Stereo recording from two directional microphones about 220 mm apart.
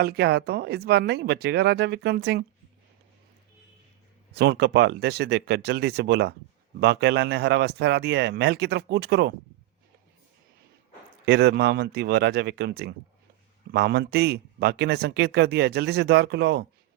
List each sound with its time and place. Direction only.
0.0 s a man's voice: 45° right (ahead or behind)
4.4 s a man's voice: 50° right (ahead or behind)
11.3 s a man's voice: 50° right (ahead or behind)